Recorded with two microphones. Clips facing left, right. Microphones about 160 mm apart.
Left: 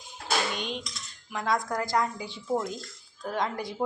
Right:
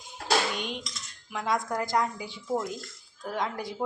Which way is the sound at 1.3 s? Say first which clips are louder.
Left 1 dB; 10° right (ahead or behind).